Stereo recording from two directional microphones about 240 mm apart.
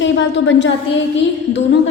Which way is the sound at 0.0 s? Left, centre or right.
Left.